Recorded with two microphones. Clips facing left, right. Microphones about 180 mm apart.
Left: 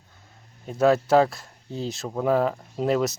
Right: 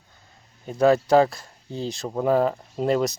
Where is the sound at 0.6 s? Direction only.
Centre (ahead or behind).